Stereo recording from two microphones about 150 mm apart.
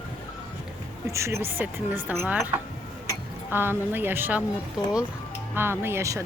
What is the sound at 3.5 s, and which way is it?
Speech, 15° right (ahead or behind).